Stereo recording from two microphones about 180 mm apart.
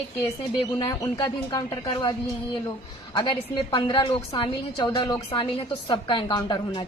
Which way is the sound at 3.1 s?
25° left (ahead or behind).